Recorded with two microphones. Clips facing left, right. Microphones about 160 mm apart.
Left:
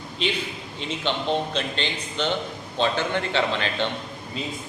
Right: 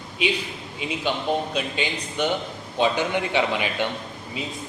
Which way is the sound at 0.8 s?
10° right (ahead or behind).